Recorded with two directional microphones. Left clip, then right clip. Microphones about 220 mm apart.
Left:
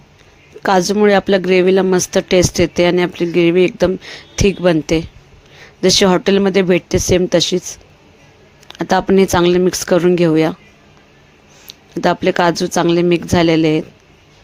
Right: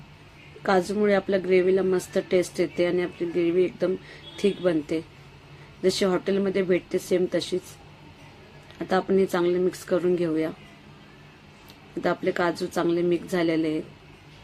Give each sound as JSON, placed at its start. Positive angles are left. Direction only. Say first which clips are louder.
{"t": 0.6, "sound": "speech", "louder": "left 10 dB", "side_deg": 40}
{"t": 8.6, "sound": "speech", "louder": "left 10 dB", "side_deg": 45}
{"t": 11.7, "sound": "speech", "louder": "left 11 dB", "side_deg": 40}